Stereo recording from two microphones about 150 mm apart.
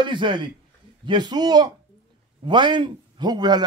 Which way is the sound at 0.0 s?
30° right (ahead or behind).